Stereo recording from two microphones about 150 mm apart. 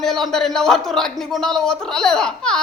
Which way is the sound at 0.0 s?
Centre (ahead or behind).